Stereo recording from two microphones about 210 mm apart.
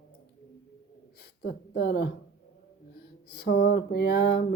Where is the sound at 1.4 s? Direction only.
50° left (ahead or behind).